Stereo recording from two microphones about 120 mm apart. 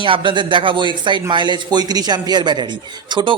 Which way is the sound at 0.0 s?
45° right (ahead or behind).